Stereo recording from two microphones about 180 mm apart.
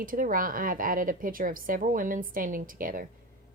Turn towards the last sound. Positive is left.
turn(degrees=-50)  # may be behind; listen again after turning